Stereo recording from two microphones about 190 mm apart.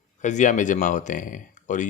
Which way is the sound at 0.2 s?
40° left (ahead or behind).